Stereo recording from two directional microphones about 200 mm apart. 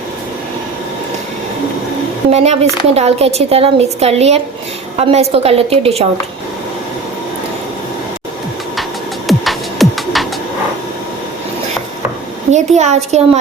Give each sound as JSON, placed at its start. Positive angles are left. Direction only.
{"t": 2.3, "sound": "a woman's voice", "side_deg": -30}
{"t": 9.2, "sound": "music", "side_deg": 0}
{"t": 12.5, "sound": "a woman's voice", "side_deg": -35}